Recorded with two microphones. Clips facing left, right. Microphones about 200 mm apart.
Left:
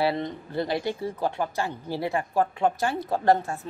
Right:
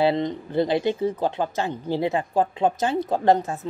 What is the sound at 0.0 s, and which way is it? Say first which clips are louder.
Speech: right 5 dB; 20° right (ahead or behind).